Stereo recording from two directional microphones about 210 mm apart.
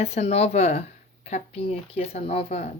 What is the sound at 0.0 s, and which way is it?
Speech, 30° left (ahead or behind).